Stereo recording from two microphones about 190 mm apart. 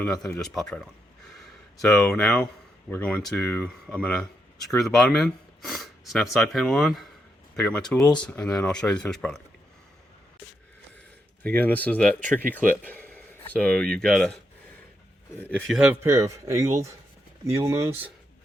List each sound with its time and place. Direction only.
0.0 s speech: 5° left (ahead or behind)
11.4 s speech: 10° left (ahead or behind)
15.4 s speech: 5° left (ahead or behind); by 18.1 s 10° right (ahead or behind)